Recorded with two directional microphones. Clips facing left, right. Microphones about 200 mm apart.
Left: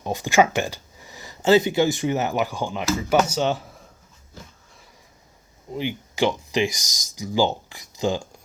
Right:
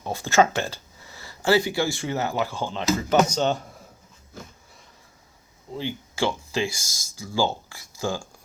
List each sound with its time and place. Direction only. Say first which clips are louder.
0.0 s speech: left 1 dB; 15° left (ahead or behind)
5.7 s speech: left 3 dB; 15° left (ahead or behind)